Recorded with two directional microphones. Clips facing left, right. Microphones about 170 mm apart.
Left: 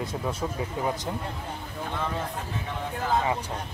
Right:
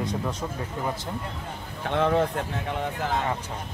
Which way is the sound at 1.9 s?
70° right (ahead or behind).